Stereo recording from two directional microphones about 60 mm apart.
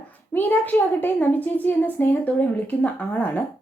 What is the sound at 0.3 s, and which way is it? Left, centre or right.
A woman's voice, left.